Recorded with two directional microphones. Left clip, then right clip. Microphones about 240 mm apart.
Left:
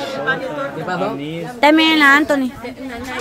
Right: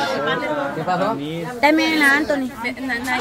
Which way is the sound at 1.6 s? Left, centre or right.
Centre.